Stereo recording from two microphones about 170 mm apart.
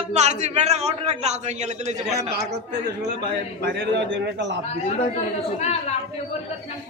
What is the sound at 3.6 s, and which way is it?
Speech, 90° right.